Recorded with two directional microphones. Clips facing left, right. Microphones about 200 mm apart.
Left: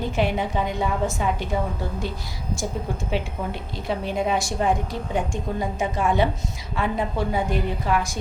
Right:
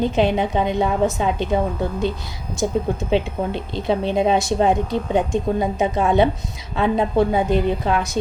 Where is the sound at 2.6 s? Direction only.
20° right (ahead or behind).